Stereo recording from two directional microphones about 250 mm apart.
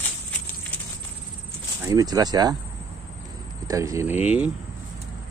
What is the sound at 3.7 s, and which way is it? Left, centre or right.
Speech, centre.